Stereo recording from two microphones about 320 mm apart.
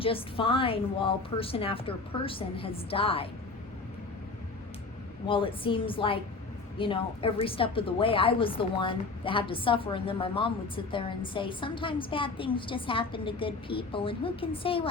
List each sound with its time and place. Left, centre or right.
0.0 s a woman's voice: centre
5.2 s a woman's voice: centre